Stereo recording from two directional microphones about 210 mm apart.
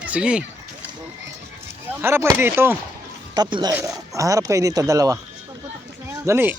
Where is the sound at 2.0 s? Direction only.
10° right (ahead or behind).